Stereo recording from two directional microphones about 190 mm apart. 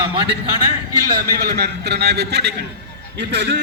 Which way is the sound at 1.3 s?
55° right (ahead or behind).